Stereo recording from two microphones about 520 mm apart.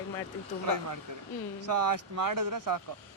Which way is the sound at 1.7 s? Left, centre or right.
Right.